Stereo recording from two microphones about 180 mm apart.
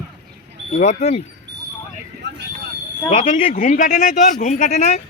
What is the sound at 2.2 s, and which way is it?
Vehicle, 75° right (ahead or behind).